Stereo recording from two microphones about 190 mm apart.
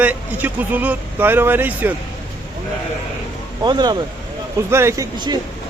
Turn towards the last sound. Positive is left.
turn(degrees=-20)  # may be behind; listen again after turning